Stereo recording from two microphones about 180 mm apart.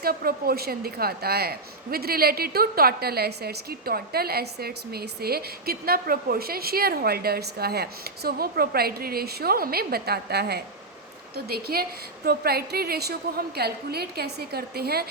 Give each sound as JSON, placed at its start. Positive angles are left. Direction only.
{"t": 0.0, "sound": "a woman's voice", "side_deg": -55}